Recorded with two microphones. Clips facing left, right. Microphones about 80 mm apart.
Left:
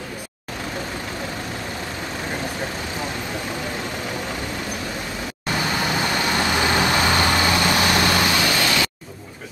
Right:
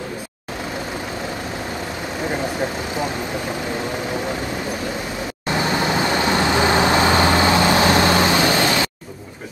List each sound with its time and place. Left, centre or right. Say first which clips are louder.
5.7 s vehicle: right 4 dB; right